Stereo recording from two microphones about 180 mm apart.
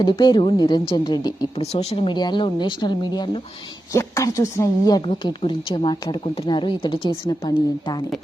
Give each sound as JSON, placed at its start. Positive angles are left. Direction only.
{"t": 0.0, "sound": "a woman's voice", "side_deg": 25}
{"t": 1.6, "sound": "a woman's voice", "side_deg": 35}